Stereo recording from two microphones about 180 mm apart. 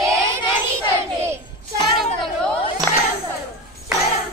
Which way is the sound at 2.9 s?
10° left (ahead or behind).